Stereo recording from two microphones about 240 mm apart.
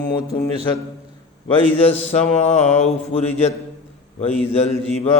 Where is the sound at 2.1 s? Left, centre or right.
Left.